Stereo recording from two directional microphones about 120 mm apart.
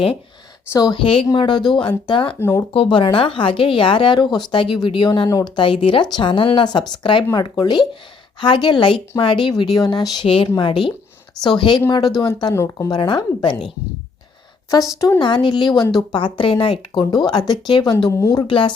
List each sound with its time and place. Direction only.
0.7 s speech: 35° left (ahead or behind)
0.9 s speech: 50° left (ahead or behind)
1.3 s speech: 40° left (ahead or behind)
2.4 s a woman's voice: 25° left (ahead or behind)
2.7 s speech: 45° left (ahead or behind)
5.6 s a woman's voice: 45° left (ahead or behind); by 12.9 s 25° left (ahead or behind)
12.9 s speech: 40° left (ahead or behind)
14.7 s a woman's voice: 30° left (ahead or behind)
15.2 s speech: 40° left (ahead or behind)
18.1 s a woman's voice: 30° left (ahead or behind)
18.4 s speech: 45° left (ahead or behind)